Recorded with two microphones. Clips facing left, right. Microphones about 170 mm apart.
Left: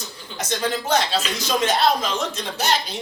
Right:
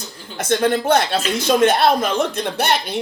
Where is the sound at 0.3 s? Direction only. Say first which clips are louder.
Right 7 dB; 55° right (ahead or behind).